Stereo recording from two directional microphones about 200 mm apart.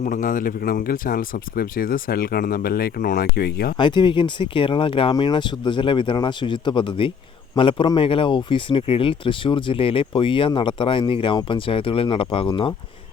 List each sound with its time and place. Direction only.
0.0 s speech: 40° left (ahead or behind)
3.8 s speech: 25° left (ahead or behind)